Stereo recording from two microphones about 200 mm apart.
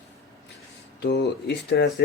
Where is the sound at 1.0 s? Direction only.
55° left (ahead or behind).